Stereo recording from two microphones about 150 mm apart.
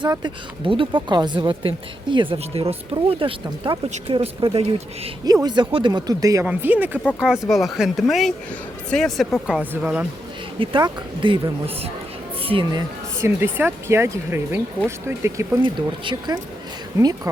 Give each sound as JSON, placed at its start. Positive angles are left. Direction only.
{"t": 0.0, "sound": "speech", "side_deg": -30}
{"t": 5.2, "sound": "speech", "side_deg": -25}
{"t": 6.4, "sound": "speech", "side_deg": -10}
{"t": 7.0, "sound": "speech", "side_deg": 0}
{"t": 10.6, "sound": "speech", "side_deg": -30}
{"t": 13.1, "sound": "speech", "side_deg": -15}
{"t": 15.6, "sound": "speech", "side_deg": -30}